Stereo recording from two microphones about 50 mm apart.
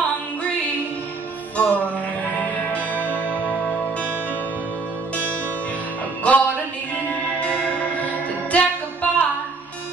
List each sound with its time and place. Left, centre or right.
1.6 s music: left
6.2 s music: left
8.5 s music: left